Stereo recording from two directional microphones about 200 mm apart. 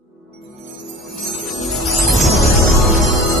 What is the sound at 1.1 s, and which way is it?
Music, centre (ahead or behind).